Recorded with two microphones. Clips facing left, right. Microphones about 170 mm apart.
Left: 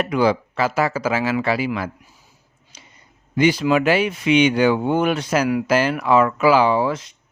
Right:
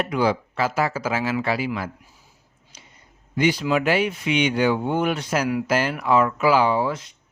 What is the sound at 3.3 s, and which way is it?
Speech, 90° left.